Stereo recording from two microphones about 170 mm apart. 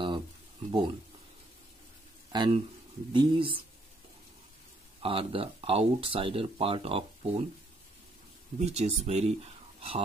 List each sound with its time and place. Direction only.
0.7 s speech: 25° right (ahead or behind)
2.3 s speech: 25° right (ahead or behind)
5.0 s speech: 30° right (ahead or behind)
8.5 s speech: 40° right (ahead or behind)